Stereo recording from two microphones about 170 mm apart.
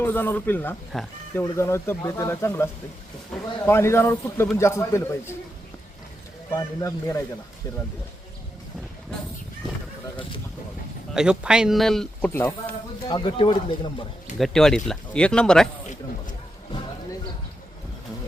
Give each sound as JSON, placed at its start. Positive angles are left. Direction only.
{"t": 0.0, "sound": "a man's voice", "side_deg": 15}
{"t": 3.3, "sound": "speech", "side_deg": 5}
{"t": 3.7, "sound": "a man's voice", "side_deg": 15}
{"t": 6.5, "sound": "a man's voice", "side_deg": 15}
{"t": 11.1, "sound": "speech", "side_deg": -5}
{"t": 12.3, "sound": "a man's voice", "side_deg": 15}
{"t": 13.1, "sound": "speech", "side_deg": 30}
{"t": 14.3, "sound": "speech", "side_deg": 0}